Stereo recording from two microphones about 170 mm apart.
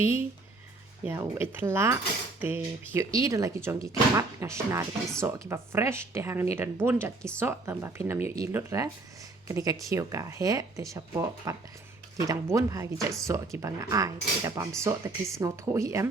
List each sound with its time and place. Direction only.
0.0 s speech: 15° right (ahead or behind)